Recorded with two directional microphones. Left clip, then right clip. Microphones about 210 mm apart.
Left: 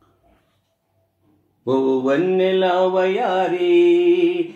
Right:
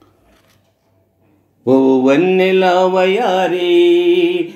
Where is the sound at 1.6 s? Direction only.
30° right (ahead or behind).